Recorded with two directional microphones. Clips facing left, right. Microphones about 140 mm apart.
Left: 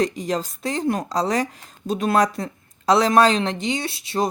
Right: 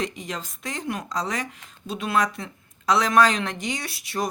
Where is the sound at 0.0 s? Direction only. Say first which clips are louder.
Left 8 dB; 35° left (ahead or behind).